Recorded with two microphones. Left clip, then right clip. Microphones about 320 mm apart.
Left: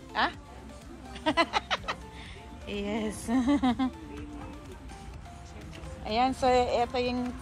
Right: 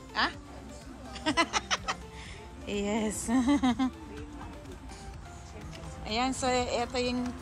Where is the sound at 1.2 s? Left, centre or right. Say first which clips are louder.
Left 2 dB; centre.